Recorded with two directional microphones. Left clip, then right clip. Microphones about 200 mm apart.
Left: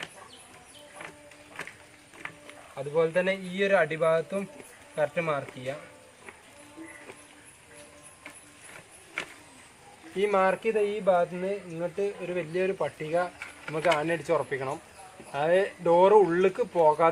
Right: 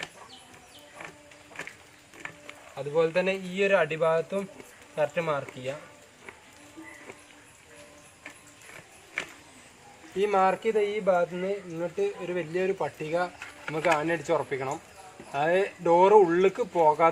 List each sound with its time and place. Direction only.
2.2 s a sound: 10° left (ahead or behind)
2.7 s speech: 10° right (ahead or behind)
10.2 s speech: 15° right (ahead or behind)